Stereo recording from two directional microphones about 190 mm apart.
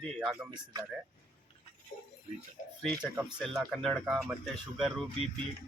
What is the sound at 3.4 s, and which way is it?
Speech, centre (ahead or behind).